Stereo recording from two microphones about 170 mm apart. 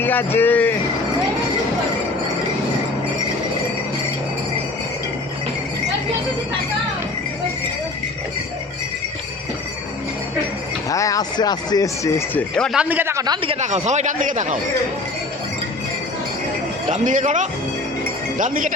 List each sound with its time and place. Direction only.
0.0 s speech: 10° left (ahead or behind)
10.8 s speech: 20° left (ahead or behind); by 12.8 s 5° left (ahead or behind)
12.8 s a man's voice: 10° right (ahead or behind); by 14.6 s 50° right (ahead or behind)
16.9 s a man's voice: 50° right (ahead or behind)